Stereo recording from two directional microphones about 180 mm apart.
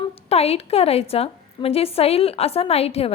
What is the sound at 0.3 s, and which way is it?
A woman's voice, 35° left (ahead or behind).